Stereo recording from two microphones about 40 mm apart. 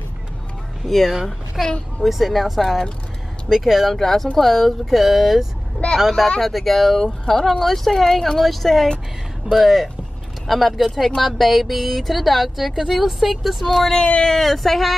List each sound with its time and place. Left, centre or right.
0.8 s a woman's voice: centre
3.9 s a woman's voice: centre
13.7 s speech: centre
13.9 s speech: left
14.3 s speech: centre